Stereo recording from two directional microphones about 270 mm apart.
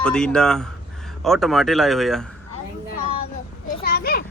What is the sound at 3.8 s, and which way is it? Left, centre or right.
Children playing, left.